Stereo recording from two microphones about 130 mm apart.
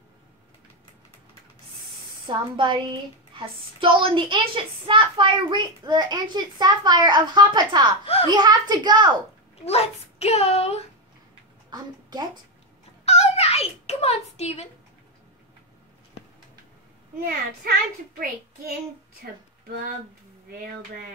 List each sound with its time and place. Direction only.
2.2 s speech: 40° right (ahead or behind)
8.0 s a child's voice: 50° left (ahead or behind)
8.3 s speech: 30° right (ahead or behind)
9.7 s a child's voice: 50° left (ahead or behind)
11.7 s a child's voice: 30° right (ahead or behind)
13.0 s a sound: 55° left (ahead or behind)